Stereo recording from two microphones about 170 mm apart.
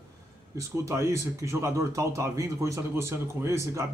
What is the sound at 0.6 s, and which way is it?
A man's voice, 15° right (ahead or behind).